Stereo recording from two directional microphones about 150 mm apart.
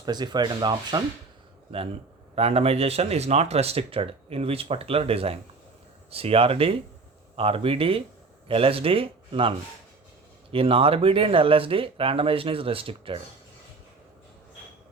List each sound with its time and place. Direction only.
0.0 s speech: 30° right (ahead or behind)
2.3 s speech: 40° right (ahead or behind)